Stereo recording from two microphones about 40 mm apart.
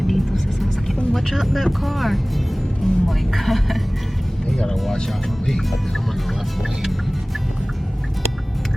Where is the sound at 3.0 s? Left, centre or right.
Centre.